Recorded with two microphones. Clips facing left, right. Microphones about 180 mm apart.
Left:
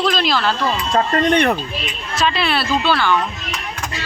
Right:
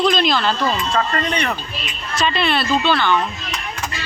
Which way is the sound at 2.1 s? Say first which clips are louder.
Even; 5° left (ahead or behind).